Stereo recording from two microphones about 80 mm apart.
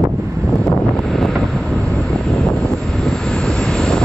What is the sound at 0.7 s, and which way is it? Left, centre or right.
Vehicle, centre.